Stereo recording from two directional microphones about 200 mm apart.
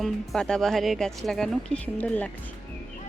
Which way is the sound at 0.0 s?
5° left (ahead or behind).